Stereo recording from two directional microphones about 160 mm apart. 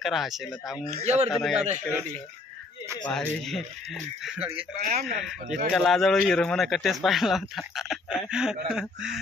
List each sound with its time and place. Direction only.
0.0 s a man's voice: centre (ahead or behind)
0.8 s a man's voice: 45° right (ahead or behind)
1.3 s a man's voice: centre (ahead or behind)
3.1 s a man's voice: centre (ahead or behind)
4.8 s speech: 55° right (ahead or behind)
5.7 s a man's voice: centre (ahead or behind)